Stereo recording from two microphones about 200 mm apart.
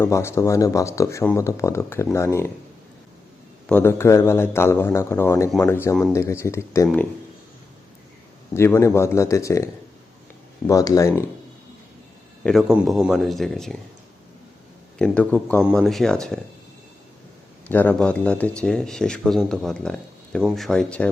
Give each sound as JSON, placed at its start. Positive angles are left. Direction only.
{"t": 0.0, "sound": "speech", "side_deg": 10}
{"t": 3.7, "sound": "speech", "side_deg": 10}
{"t": 8.5, "sound": "speech", "side_deg": 15}
{"t": 10.7, "sound": "speech", "side_deg": 15}
{"t": 12.4, "sound": "speech", "side_deg": 5}
{"t": 14.9, "sound": "speech", "side_deg": 5}
{"t": 17.7, "sound": "speech", "side_deg": 10}